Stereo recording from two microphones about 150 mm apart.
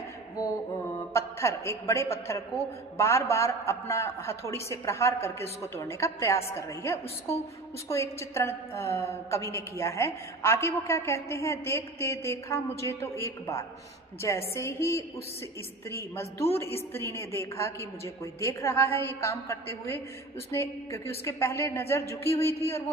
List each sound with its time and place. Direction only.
0.9 s a man's voice: 20° left (ahead or behind)